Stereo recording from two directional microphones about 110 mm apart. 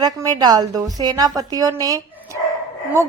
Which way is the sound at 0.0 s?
35° right (ahead or behind).